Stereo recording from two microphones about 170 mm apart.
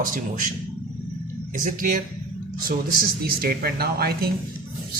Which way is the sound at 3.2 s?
60° right (ahead or behind).